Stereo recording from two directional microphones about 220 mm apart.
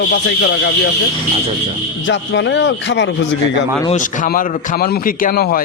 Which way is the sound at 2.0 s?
55° left (ahead or behind).